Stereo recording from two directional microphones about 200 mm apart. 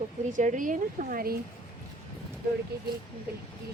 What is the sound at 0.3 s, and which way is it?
Speech, 40° right (ahead or behind).